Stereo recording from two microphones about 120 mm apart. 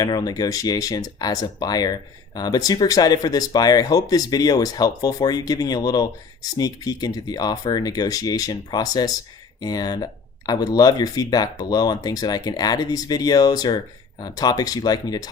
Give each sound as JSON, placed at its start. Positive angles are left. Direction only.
{"t": 0.0, "sound": "speech", "side_deg": 30}